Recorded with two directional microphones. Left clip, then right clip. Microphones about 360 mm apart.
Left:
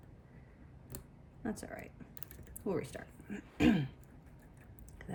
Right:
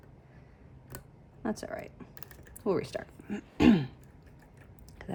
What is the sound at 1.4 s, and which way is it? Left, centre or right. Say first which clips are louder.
Speech: right 7 dB; centre.